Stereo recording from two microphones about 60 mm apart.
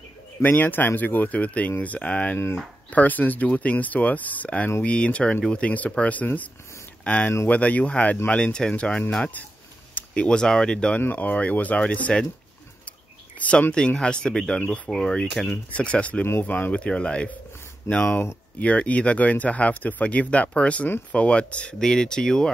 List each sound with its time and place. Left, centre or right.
0.4 s speech: left
2.3 s speech: left
2.9 s speech: left
11.0 s speech: left
13.4 s speech: left
16.7 s speech: centre
18.0 s speech: left
18.6 s speech: left